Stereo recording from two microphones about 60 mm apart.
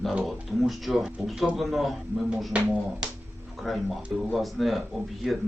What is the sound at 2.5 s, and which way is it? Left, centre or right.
Speech, centre.